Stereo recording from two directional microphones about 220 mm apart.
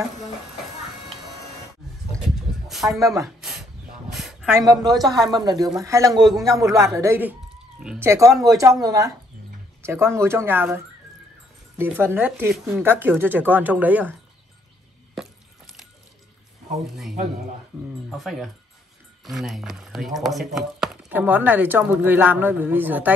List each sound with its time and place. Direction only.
2.3 s a sound: centre (ahead or behind)
4.6 s speech: 15° right (ahead or behind)
8.1 s speech: 15° right (ahead or behind)
11.8 s speech: 10° right (ahead or behind)
15.1 s a sound: centre (ahead or behind)
18.1 s speech: centre (ahead or behind)